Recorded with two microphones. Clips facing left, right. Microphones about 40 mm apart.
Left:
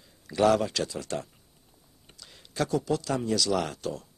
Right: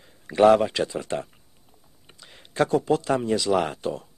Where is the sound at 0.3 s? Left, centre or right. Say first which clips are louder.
Right 6 dB; right.